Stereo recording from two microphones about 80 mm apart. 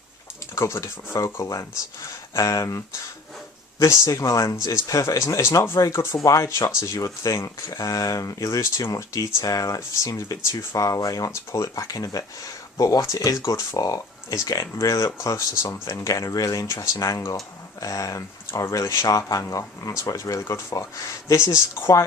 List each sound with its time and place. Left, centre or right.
0.5 s speech: left
1.1 s speech: left